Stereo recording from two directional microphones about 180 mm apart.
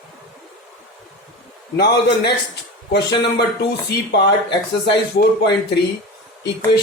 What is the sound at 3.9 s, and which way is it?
Speech, 65° left (ahead or behind).